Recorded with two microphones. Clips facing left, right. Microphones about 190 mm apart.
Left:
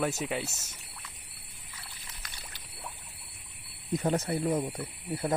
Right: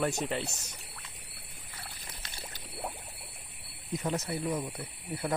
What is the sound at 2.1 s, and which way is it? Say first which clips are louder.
Pour: right 2 dB; 30° right (ahead or behind).